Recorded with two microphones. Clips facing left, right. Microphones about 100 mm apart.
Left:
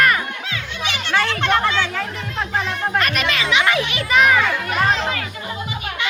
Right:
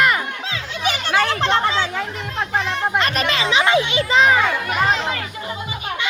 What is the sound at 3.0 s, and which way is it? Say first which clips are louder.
Children playing: right 1 dB; 30° right (ahead or behind).